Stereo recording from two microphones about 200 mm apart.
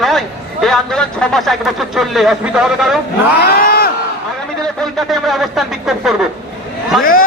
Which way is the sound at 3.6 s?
50° left (ahead or behind).